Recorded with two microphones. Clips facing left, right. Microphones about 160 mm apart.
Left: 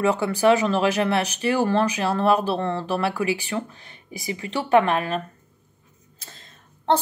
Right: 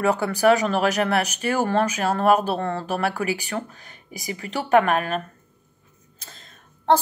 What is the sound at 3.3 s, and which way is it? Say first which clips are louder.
Speech: left 1 dB; 25° left (ahead or behind).